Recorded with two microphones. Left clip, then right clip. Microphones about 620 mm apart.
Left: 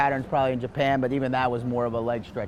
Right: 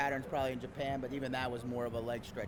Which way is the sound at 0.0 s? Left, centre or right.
Left.